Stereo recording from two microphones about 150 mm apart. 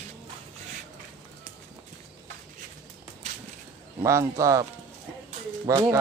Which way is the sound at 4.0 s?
20° right (ahead or behind).